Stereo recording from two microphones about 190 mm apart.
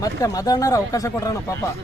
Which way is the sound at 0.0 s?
20° left (ahead or behind).